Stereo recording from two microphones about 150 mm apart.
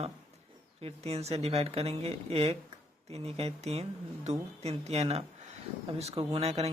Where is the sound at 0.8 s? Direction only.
45° right (ahead or behind).